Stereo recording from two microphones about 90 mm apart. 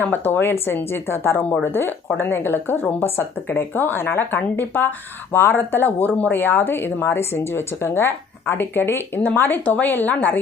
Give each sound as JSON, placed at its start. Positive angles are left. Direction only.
{"t": 0.0, "sound": "speech", "side_deg": 20}